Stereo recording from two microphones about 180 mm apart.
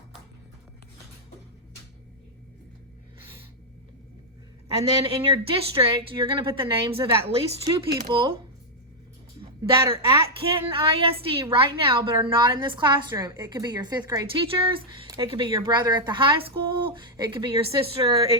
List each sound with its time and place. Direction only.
4.8 s a woman's voice: 30° right (ahead or behind)
9.4 s a sound: 20° right (ahead or behind)
10.7 s a woman's voice: 30° right (ahead or behind)